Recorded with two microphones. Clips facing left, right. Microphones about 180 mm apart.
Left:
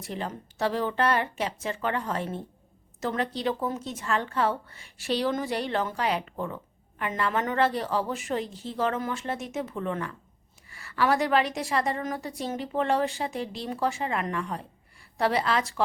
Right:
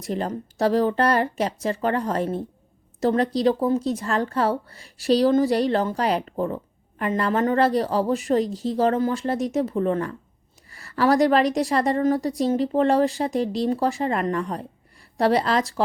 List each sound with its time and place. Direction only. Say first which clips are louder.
0.0 s a woman's voice: right 7 dB; 40° right (ahead or behind)